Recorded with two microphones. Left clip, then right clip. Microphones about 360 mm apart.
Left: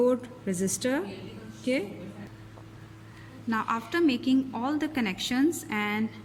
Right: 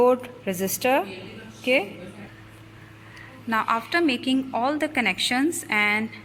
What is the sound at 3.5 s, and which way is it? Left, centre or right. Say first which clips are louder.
A woman's voice: right 6 dB; centre.